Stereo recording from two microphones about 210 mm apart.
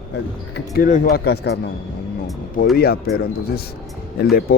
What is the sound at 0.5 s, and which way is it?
Speech, 45° left (ahead or behind).